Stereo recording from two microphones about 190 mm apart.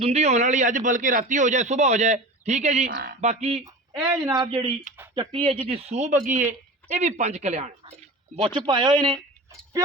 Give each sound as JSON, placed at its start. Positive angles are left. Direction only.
{"t": 0.0, "sound": "a man's voice", "side_deg": -35}
{"t": 2.9, "sound": "speech", "side_deg": -55}
{"t": 3.2, "sound": "a man's voice", "side_deg": -35}
{"t": 4.0, "sound": "a man's voice", "side_deg": -20}